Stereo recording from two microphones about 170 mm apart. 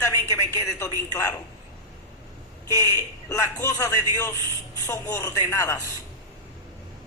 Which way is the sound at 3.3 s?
15° left (ahead or behind).